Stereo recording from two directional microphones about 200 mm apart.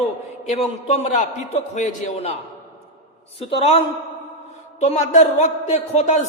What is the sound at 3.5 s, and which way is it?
A woman's voice, 30° left (ahead or behind).